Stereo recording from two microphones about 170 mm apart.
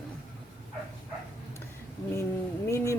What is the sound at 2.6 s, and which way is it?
Speech, 15° left (ahead or behind).